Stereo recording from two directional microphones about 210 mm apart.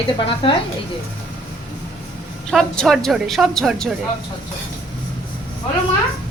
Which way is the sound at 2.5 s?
Centre (ahead or behind).